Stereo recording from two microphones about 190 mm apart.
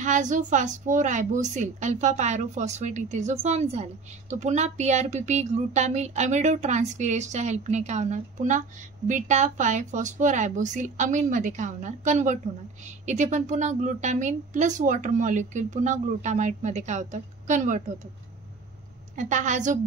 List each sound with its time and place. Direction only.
0.0 s a woman's voice: 40° right (ahead or behind)
19.1 s a woman's voice: 40° right (ahead or behind)